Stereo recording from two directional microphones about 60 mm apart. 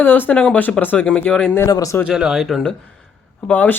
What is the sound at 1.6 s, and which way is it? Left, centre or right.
Speech, left.